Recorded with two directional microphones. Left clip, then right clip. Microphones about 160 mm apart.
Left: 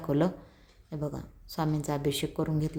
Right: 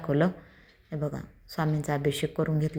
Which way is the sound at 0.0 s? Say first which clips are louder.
Right 2 dB; centre (ahead or behind).